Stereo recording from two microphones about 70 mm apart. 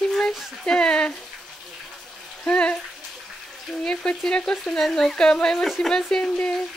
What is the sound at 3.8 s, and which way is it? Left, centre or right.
Speech, centre.